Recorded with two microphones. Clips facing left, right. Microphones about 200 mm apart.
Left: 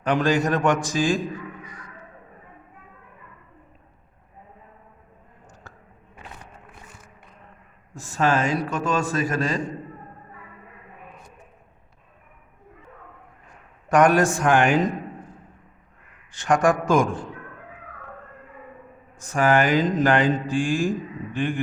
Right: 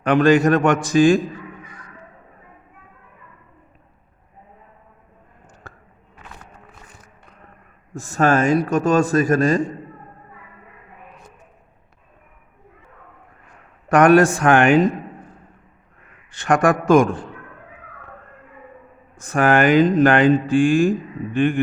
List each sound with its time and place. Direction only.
0.0 s speech: 60° right (ahead or behind)
7.9 s a man's voice: 45° right (ahead or behind)
13.9 s speech: 60° right (ahead or behind)
16.4 s speech: 60° right (ahead or behind)
19.2 s speech: 60° right (ahead or behind)